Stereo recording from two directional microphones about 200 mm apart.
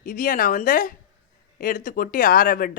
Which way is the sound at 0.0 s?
40° left (ahead or behind).